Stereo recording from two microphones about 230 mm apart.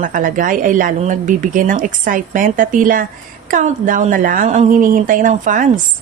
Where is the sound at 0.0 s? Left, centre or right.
Right.